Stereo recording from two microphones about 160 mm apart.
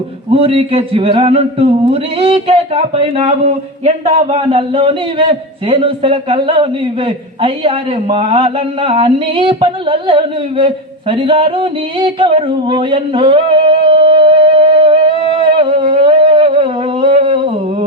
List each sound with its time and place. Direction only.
0.3 s a man's voice: 35° right (ahead or behind)
8.1 s a man's voice: 35° right (ahead or behind)
11.1 s a sound: 35° right (ahead or behind)